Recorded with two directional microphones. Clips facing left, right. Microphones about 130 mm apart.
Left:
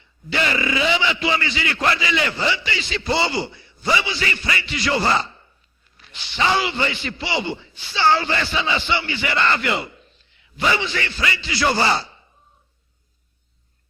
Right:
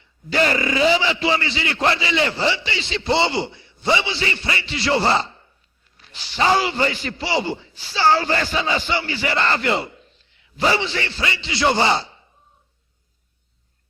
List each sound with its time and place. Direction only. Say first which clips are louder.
0.3 s a man's voice: right 3 dB; 40° right (ahead or behind); by 12.2 s 20° right (ahead or behind)